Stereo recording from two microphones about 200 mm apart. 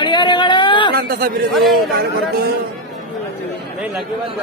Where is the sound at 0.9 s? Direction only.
45° right (ahead or behind).